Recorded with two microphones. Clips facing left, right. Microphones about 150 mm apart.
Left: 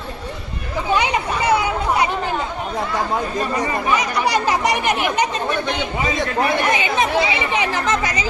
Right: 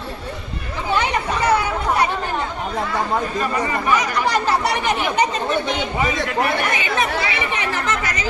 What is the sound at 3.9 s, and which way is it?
Speech, 15° left (ahead or behind).